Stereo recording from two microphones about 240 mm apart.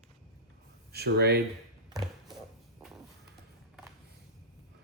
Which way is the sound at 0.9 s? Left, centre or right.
Right.